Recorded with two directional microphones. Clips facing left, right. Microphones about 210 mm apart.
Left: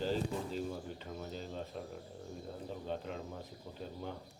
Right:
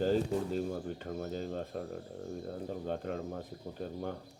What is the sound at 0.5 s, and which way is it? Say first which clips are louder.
Speech: right 5 dB; 50° right (ahead or behind).